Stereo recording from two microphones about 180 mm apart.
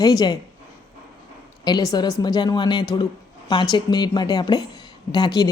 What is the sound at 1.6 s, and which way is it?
Speech, 20° left (ahead or behind).